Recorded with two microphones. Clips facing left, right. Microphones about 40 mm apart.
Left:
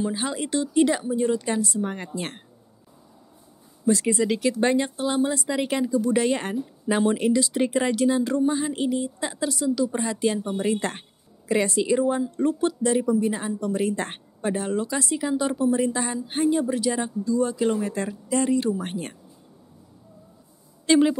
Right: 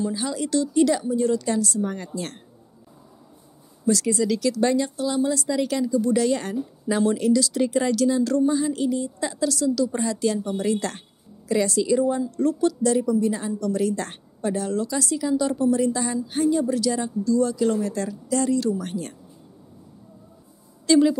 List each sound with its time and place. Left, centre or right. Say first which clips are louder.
0.0 s a woman's voice: right 1 dB; left
3.8 s a woman's voice: even; left
20.8 s a woman's voice: right 1 dB; left